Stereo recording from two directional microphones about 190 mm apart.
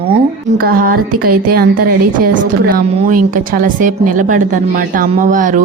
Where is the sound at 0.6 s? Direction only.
50° right (ahead or behind).